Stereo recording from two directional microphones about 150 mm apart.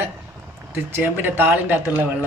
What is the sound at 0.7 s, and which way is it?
Speech, 15° right (ahead or behind).